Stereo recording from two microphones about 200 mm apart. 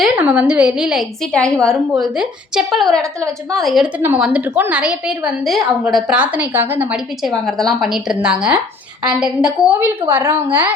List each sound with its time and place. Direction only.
0.0 s a woman's voice: 5° right (ahead or behind)